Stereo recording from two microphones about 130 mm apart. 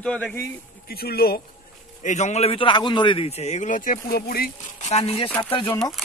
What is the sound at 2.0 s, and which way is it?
A man's voice, 65° left (ahead or behind).